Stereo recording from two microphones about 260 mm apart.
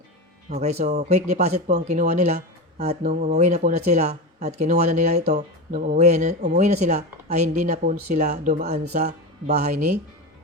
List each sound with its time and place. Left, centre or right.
0.5 s speech: right